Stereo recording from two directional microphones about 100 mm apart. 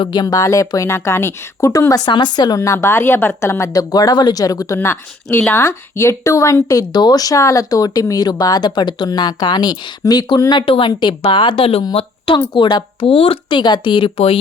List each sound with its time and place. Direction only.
0.0 s speech: 45° left (ahead or behind)
2.0 s speech: 50° left (ahead or behind)
2.6 s speech: 30° left (ahead or behind); by 11.8 s 65° left (ahead or behind)
12.5 s speech: 50° left (ahead or behind); by 14.3 s 65° left (ahead or behind)